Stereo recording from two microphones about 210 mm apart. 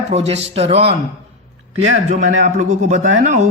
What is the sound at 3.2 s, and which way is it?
Speech, 35° right (ahead or behind).